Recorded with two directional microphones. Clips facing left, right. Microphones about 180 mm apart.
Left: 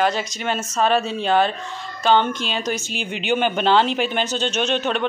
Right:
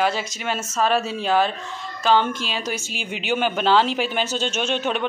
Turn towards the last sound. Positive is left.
turn(degrees=-10)  # may be behind; listen again after turning